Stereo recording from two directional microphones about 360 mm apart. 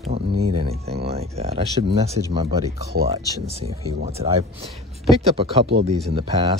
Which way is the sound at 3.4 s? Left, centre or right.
Centre.